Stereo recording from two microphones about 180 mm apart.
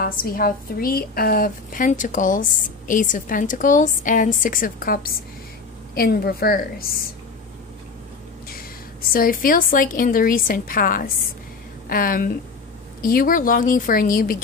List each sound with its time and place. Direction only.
0.0 s a woman's voice: 55° left (ahead or behind)
8.5 s a woman's voice: 55° left (ahead or behind)